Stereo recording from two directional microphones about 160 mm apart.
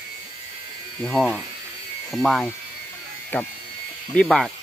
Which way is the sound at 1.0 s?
5° left (ahead or behind).